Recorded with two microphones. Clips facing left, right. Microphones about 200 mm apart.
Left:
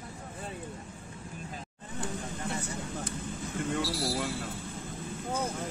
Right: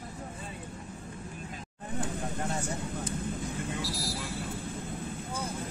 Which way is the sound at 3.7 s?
60° left (ahead or behind).